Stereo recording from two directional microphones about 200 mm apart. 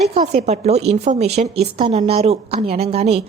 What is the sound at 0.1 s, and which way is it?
A woman's voice, 35° right (ahead or behind).